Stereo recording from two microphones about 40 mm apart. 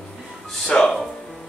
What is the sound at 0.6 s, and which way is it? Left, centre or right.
Speech, left.